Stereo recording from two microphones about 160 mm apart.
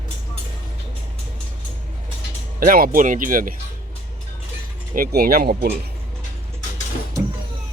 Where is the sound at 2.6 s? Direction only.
65° right (ahead or behind).